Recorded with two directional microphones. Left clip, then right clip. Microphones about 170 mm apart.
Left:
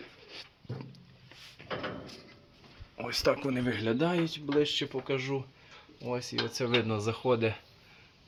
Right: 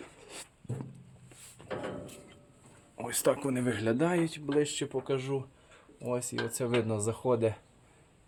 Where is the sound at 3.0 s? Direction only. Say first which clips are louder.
Left 1 dB; centre (ahead or behind).